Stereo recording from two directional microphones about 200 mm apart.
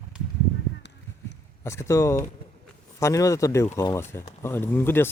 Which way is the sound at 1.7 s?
15° left (ahead or behind).